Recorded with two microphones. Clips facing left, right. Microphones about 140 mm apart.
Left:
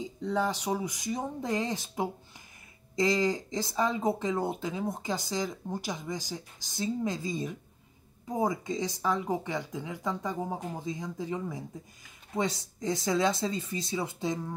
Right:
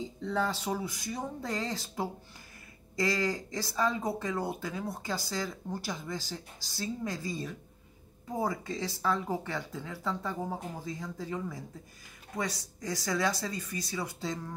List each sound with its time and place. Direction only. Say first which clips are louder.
0.2 s speech: left 2 dB; 15° left (ahead or behind)